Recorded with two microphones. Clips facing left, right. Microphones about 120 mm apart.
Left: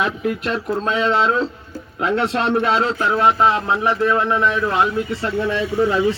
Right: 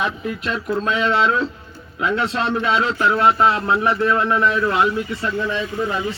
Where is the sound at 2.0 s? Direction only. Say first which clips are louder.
Left 2 dB; 40° left (ahead or behind).